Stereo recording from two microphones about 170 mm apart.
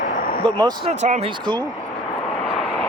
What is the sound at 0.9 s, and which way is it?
Speech, 45° right (ahead or behind).